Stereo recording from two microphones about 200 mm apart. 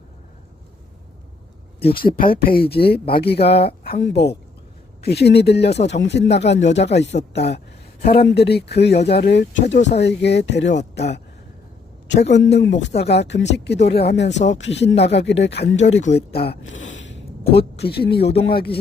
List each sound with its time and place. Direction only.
1.8 s speech: 50° left (ahead or behind)
12.3 s speech: 60° left (ahead or behind)